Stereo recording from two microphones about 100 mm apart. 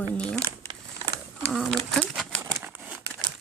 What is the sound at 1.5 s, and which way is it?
Speech, 5° left (ahead or behind).